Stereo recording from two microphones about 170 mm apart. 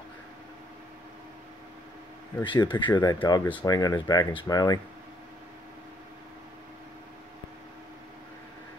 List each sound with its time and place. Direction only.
2.4 s speech: 25° left (ahead or behind)